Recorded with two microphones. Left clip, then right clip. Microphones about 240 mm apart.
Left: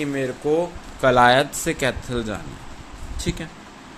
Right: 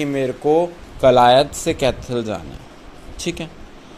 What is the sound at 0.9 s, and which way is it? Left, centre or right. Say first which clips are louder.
Speech: right 4 dB; centre.